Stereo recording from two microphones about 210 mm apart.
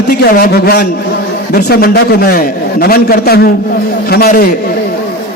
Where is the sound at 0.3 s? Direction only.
45° left (ahead or behind).